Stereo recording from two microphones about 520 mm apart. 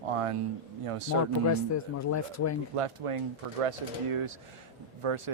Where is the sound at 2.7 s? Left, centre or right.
Right.